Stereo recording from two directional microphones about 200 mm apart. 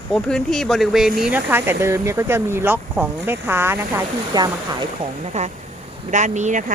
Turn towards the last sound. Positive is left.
turn(degrees=-35)  # may be behind; listen again after turning